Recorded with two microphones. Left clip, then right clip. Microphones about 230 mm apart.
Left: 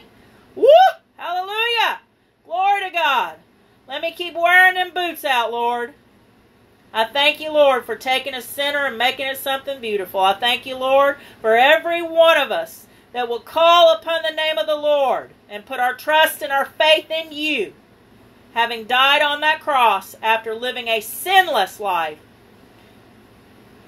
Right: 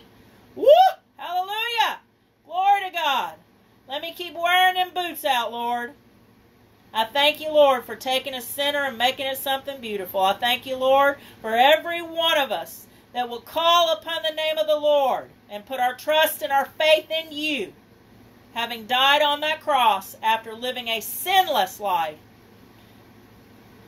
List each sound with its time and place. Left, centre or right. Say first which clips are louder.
0.6 s hiccup: left 4 dB; right
2.5 s a sound: left 2 dB; right
6.9 s a woman's voice: left 3 dB; right